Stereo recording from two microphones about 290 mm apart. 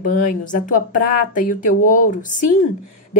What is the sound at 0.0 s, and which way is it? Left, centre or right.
Speech, left.